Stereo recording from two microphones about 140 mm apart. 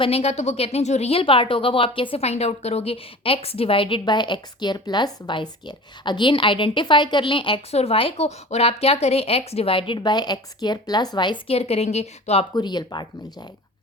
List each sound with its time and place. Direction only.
0.0 s speech: 45° left (ahead or behind)
12.5 s speech: 30° left (ahead or behind)